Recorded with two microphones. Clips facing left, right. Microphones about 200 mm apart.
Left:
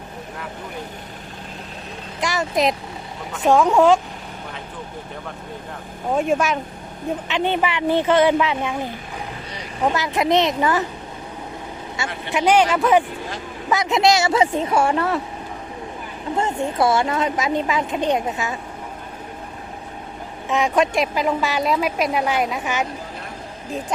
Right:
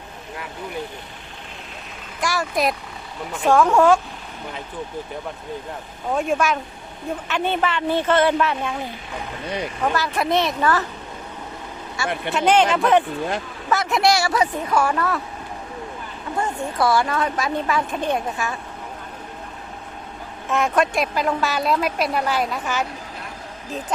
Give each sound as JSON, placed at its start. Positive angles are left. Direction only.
{"t": 2.2, "sound": "a woman's voice", "side_deg": 20}
{"t": 6.1, "sound": "speech", "side_deg": 5}
{"t": 7.3, "sound": "a woman's voice", "side_deg": 15}
{"t": 12.0, "sound": "a woman's voice", "side_deg": 20}
{"t": 12.3, "sound": "a woman's voice", "side_deg": 10}
{"t": 16.3, "sound": "a woman's voice", "side_deg": 25}
{"t": 20.5, "sound": "a woman's voice", "side_deg": 15}